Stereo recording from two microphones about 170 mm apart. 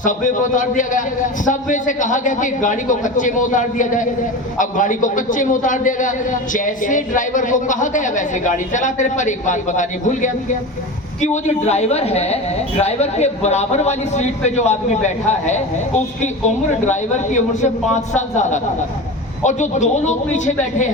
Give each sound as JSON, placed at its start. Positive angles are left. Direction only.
{"t": 0.0, "sound": "a man's voice", "side_deg": 50}